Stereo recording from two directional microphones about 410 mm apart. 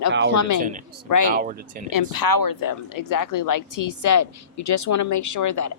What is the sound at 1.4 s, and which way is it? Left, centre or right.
Speech, centre.